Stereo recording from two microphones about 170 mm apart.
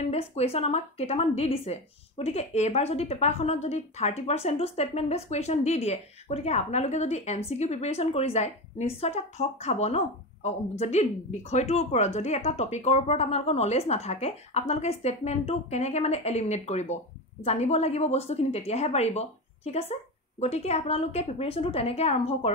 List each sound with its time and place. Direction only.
0.1 s speech: 40° left (ahead or behind)